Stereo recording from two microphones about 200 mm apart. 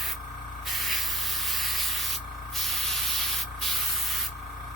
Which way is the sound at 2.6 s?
Centre (ahead or behind).